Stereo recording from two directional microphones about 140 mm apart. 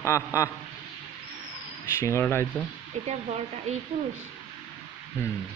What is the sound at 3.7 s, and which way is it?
Speech, 55° right (ahead or behind).